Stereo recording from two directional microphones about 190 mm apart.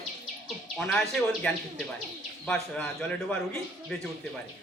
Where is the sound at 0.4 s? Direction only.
Centre (ahead or behind).